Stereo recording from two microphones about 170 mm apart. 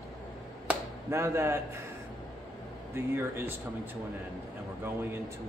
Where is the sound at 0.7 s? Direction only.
15° right (ahead or behind).